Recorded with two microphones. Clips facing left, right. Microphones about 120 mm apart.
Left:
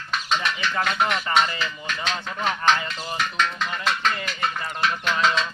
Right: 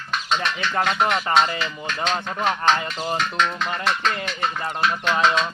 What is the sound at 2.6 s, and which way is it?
Speech, 30° right (ahead or behind).